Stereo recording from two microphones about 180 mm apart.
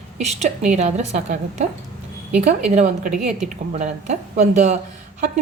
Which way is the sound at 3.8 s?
40° right (ahead or behind).